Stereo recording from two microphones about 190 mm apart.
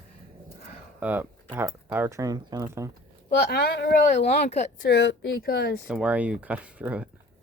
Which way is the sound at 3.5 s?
55° left (ahead or behind).